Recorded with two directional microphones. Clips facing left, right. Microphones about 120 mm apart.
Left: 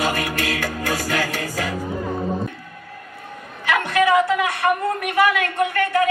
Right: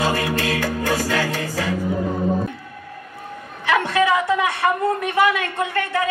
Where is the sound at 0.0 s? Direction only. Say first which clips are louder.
Right 2 dB; 25° right (ahead or behind).